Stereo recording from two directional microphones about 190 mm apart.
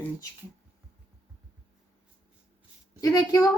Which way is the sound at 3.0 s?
20° left (ahead or behind).